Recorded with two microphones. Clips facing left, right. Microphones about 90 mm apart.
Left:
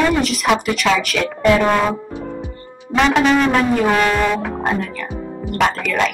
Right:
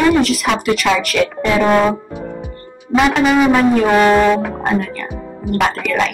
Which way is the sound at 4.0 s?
25° right (ahead or behind).